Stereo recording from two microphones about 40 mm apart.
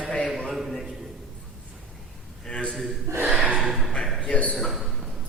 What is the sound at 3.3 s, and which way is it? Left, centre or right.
Gasp, right.